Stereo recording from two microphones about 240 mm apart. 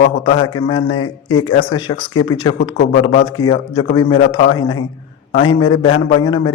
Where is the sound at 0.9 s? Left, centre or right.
Left.